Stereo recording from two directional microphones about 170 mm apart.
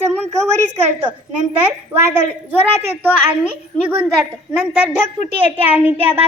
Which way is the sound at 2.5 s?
10° right (ahead or behind).